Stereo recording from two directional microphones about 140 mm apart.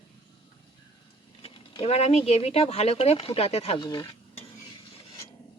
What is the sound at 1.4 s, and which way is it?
Speech, 45° left (ahead or behind).